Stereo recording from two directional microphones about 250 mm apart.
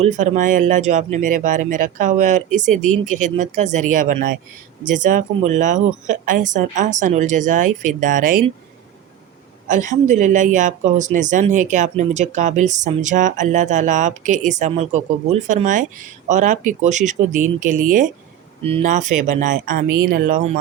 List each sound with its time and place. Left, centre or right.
0.0 s speech: right
9.6 s speech: right